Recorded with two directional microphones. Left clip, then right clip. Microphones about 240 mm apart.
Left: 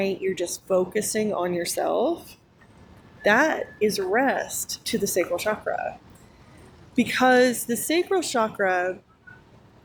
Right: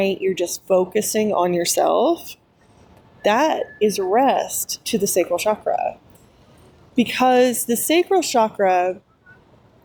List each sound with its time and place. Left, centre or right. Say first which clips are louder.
0.0 s speech: right 5 dB; right
6.9 s speech: right 3 dB; right